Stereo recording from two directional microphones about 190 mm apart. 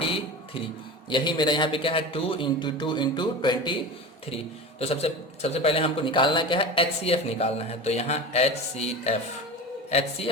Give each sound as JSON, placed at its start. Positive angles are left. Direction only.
{"t": 1.1, "sound": "a man's voice", "side_deg": 25}
{"t": 4.8, "sound": "a man's voice", "side_deg": 30}